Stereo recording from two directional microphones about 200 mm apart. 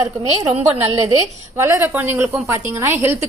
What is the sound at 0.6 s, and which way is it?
A woman's voice, 10° right (ahead or behind).